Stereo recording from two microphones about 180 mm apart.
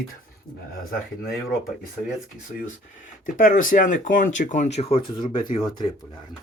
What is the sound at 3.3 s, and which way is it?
Speech, 50° left (ahead or behind).